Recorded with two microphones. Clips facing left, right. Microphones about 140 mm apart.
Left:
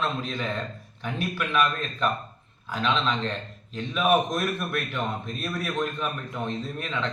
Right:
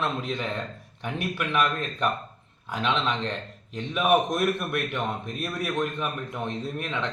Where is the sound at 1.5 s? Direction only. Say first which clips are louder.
Left 1 dB; 15° right (ahead or behind).